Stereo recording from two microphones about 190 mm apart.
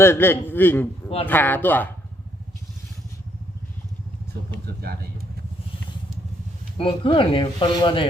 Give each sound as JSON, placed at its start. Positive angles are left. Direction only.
{"t": 0.0, "sound": "a man's voice", "side_deg": 10}
{"t": 4.8, "sound": "speech", "side_deg": -55}
{"t": 6.7, "sound": "speech", "side_deg": 25}